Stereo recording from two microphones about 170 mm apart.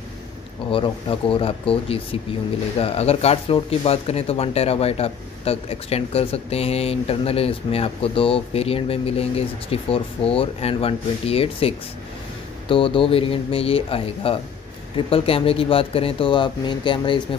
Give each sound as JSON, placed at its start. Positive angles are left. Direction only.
{"t": 0.7, "sound": "speech", "side_deg": 30}